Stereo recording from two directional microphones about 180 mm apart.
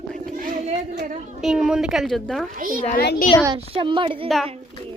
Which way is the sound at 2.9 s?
55° left (ahead or behind).